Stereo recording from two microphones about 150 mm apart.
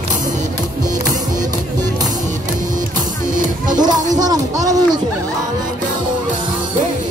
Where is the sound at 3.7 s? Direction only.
25° right (ahead or behind).